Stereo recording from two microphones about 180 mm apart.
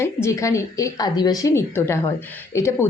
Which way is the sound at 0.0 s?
15° left (ahead or behind).